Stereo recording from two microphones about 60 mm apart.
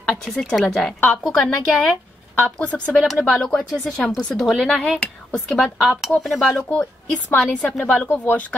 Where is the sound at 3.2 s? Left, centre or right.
Centre.